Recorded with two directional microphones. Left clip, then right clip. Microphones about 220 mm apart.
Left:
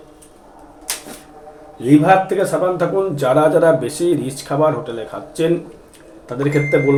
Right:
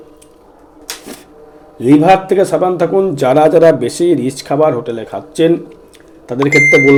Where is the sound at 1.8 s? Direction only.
40° right (ahead or behind).